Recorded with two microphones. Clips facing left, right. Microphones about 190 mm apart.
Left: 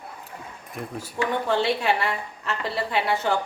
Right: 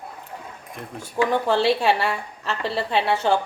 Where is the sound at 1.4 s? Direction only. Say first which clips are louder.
Right 2 dB; 30° right (ahead or behind).